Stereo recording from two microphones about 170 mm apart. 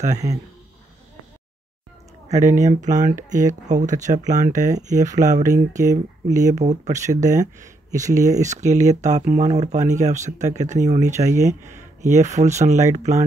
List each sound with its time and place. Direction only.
2.2 s speech: 45° right (ahead or behind)
5.5 s speech: 20° right (ahead or behind)
6.5 s speech: 45° right (ahead or behind)